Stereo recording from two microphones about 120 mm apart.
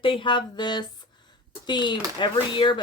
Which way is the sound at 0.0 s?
45° left (ahead or behind).